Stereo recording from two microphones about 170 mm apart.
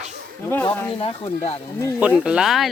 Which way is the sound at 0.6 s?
30° left (ahead or behind).